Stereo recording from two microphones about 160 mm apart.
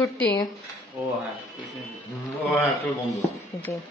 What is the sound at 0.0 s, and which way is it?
Speech, 10° left (ahead or behind).